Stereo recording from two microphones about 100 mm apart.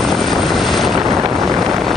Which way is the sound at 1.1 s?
20° right (ahead or behind).